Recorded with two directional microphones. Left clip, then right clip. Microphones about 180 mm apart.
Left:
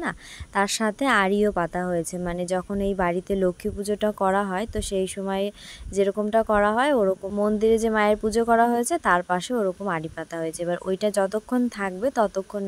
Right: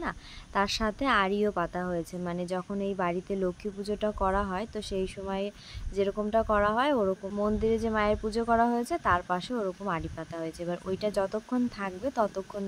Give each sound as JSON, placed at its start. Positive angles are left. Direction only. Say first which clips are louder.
{"t": 0.6, "sound": "speech", "louder": "left 5 dB", "side_deg": 35}